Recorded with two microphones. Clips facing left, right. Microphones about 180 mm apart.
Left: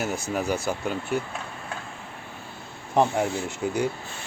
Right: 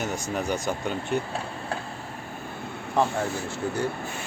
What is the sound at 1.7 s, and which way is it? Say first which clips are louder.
Vehicle: right 5 dB; 35° right (ahead or behind).